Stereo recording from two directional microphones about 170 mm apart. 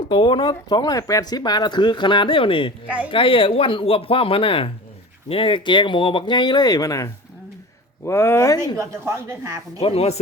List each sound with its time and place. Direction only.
0.1 s speech: 30° left (ahead or behind)
8.8 s speech: 15° right (ahead or behind)
9.8 s speech: 35° left (ahead or behind)